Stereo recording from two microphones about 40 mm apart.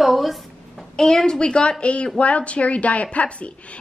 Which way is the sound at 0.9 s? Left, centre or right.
Centre.